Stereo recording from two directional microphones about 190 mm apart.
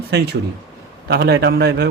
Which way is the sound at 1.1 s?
55° right (ahead or behind).